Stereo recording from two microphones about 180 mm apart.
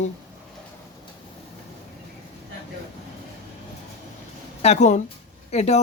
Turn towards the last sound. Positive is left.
turn(degrees=40)  # may be behind; listen again after turning